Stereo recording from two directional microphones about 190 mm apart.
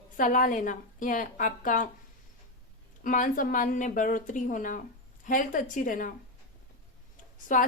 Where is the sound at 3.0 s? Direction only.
45° left (ahead or behind).